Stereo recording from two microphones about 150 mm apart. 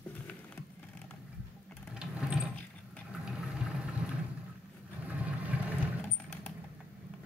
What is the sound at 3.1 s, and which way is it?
Vehicle, 5° right (ahead or behind).